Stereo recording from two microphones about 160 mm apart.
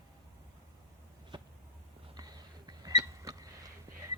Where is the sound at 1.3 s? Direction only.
30° right (ahead or behind).